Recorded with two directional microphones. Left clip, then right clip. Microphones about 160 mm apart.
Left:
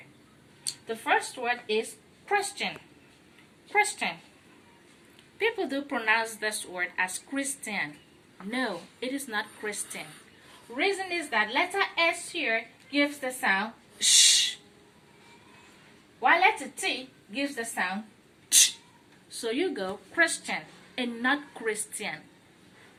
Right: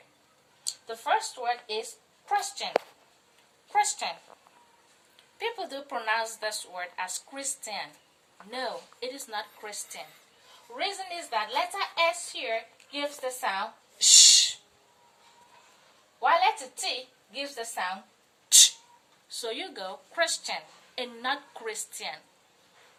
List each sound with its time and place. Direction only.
0.6 s a sound: 20° right (ahead or behind)
1.4 s a woman's voice: 25° right (ahead or behind)
5.4 s a woman's voice: 20° right (ahead or behind)
16.2 s a woman's voice: 15° right (ahead or behind)
18.4 s a sound: 15° right (ahead or behind)
19.4 s a woman's voice: 15° right (ahead or behind)